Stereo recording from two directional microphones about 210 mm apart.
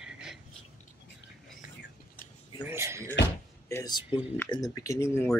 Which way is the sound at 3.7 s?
20° left (ahead or behind).